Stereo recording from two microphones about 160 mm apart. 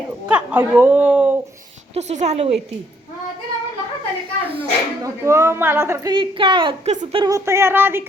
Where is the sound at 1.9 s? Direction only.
45° right (ahead or behind).